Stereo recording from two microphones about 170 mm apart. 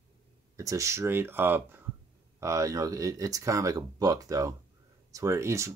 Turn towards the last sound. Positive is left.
turn(degrees=-15)  # may be behind; listen again after turning